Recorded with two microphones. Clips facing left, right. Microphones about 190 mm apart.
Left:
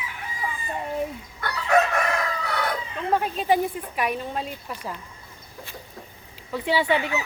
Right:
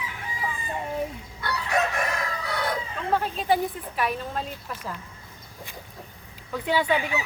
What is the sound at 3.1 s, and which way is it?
Speech, 10° left (ahead or behind).